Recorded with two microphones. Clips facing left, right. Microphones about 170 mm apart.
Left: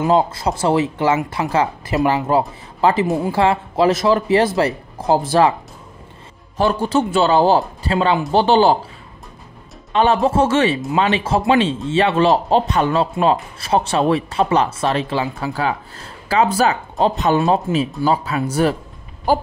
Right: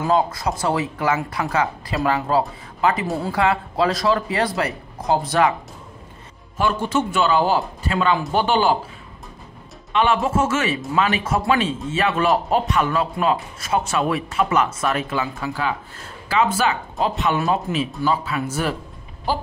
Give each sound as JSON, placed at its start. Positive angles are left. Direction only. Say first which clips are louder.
{"t": 0.0, "sound": "speech", "louder": "left 3 dB", "side_deg": 25}
{"t": 6.6, "sound": "a man's voice", "louder": "left 4 dB", "side_deg": 35}
{"t": 9.9, "sound": "a man's voice", "louder": "left 4 dB", "side_deg": 35}
{"t": 17.4, "sound": "speech", "louder": "left 5 dB", "side_deg": 25}
{"t": 17.7, "sound": "a man's voice", "louder": "left 4 dB", "side_deg": 35}
{"t": 19.3, "sound": "a sound", "louder": "left 6 dB", "side_deg": 50}